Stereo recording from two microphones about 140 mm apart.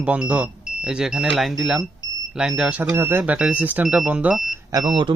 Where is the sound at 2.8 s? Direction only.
15° right (ahead or behind).